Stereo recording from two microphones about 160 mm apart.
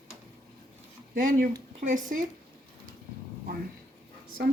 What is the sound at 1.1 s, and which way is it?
A woman's voice, 55° right (ahead or behind).